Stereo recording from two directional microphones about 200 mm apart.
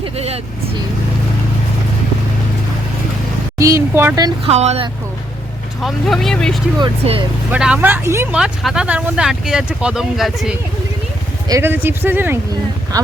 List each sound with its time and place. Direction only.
0.0 s vehicle: 30° right (ahead or behind)
3.6 s speech: 15° right (ahead or behind)
4.4 s speech: 30° right (ahead or behind)
5.8 s speech: centre (ahead or behind)
6.7 s speech: 25° right (ahead or behind)
7.5 s speech: 5° right (ahead or behind)
11.4 s speech: 15° right (ahead or behind)